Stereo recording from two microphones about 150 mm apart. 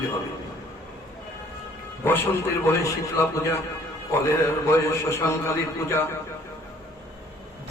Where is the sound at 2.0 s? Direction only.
15° left (ahead or behind).